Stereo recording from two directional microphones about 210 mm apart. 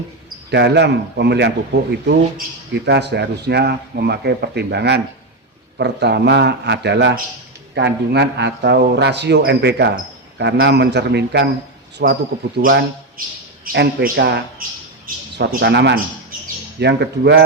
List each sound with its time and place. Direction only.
0.5 s a man's voice: 55° right (ahead or behind)